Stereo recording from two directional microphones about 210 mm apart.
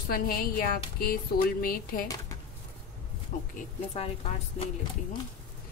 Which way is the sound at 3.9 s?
30° left (ahead or behind).